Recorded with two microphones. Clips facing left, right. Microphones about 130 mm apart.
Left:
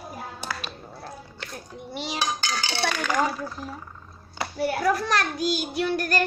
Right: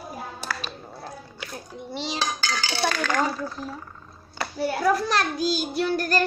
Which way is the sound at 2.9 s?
10° left (ahead or behind).